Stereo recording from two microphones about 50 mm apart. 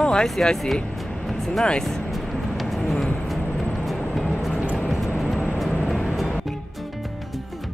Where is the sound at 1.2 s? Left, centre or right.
Centre.